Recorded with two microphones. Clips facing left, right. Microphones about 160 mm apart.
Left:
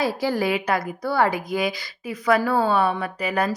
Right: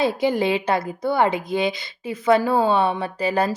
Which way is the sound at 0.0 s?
20° right (ahead or behind).